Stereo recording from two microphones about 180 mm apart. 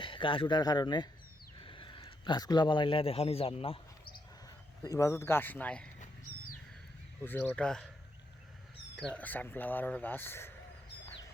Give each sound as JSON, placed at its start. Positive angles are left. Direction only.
{"t": 0.0, "sound": "speech", "side_deg": 25}
{"t": 4.4, "sound": "speech", "side_deg": 20}
{"t": 7.2, "sound": "speech", "side_deg": 10}
{"t": 9.0, "sound": "speech", "side_deg": 5}